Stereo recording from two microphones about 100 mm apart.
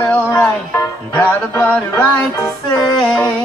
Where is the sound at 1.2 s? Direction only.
15° left (ahead or behind).